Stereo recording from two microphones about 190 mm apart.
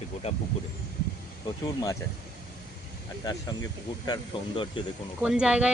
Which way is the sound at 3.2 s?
20° left (ahead or behind).